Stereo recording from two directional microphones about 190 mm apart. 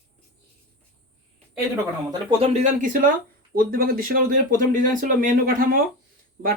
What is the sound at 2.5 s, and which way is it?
Speech, 45° right (ahead or behind).